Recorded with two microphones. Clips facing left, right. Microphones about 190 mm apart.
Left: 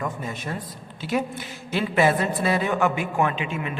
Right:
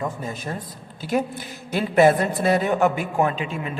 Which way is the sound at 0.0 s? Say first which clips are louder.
Right 1 dB; 35° right (ahead or behind).